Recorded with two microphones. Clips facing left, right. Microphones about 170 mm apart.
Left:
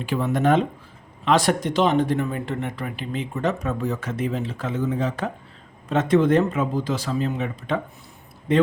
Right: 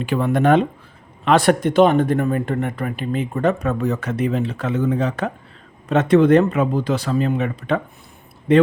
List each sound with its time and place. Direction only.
0.0 s speech: 65° right (ahead or behind)